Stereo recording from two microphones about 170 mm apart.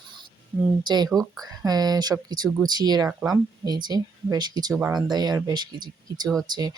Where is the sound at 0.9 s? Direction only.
25° right (ahead or behind).